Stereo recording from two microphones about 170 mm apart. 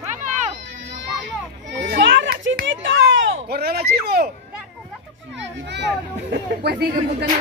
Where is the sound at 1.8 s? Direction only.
85° right; by 4.3 s 65° right (ahead or behind).